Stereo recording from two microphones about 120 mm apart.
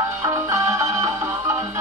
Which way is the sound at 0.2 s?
25° right (ahead or behind).